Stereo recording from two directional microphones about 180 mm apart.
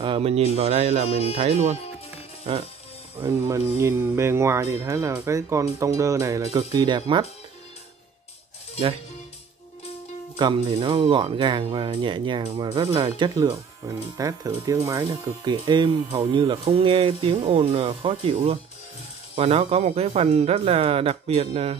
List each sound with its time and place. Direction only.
0.0 s speech: 30° right (ahead or behind)
1.0 s speech: 35° left (ahead or behind)
1.4 s speech: 35° right (ahead or behind)
3.2 s speech: 20° right (ahead or behind)
10.3 s speech: 25° right (ahead or behind)
12.9 s speech: 20° right (ahead or behind)